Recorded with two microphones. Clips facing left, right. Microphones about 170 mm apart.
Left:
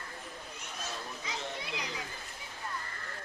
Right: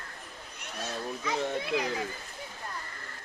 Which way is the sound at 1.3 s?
55° right (ahead or behind).